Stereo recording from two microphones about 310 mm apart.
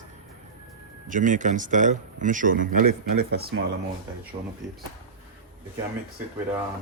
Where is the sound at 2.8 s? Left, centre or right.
Right.